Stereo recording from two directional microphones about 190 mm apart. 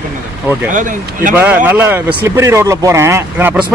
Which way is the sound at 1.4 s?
10° right (ahead or behind).